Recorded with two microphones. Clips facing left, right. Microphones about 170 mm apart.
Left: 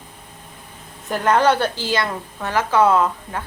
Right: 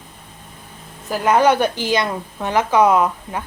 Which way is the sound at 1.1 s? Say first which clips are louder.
Right 2 dB; 10° right (ahead or behind).